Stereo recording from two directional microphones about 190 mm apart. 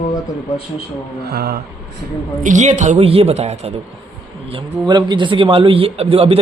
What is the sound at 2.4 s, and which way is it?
Speech, 40° right (ahead or behind).